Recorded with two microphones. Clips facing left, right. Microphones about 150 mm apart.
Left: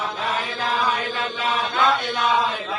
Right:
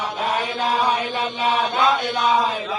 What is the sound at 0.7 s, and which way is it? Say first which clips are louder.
Chant: right 2 dB; 35° right (ahead or behind).